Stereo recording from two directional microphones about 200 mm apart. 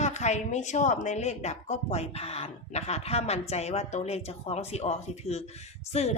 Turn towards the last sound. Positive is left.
turn(degrees=30)  # may be behind; listen again after turning